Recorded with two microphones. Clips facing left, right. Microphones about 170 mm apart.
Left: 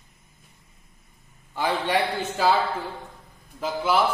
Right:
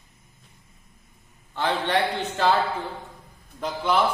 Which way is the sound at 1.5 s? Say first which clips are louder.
Even; 10° left (ahead or behind).